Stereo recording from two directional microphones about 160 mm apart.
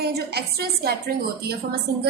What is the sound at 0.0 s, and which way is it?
Speech, 85° right.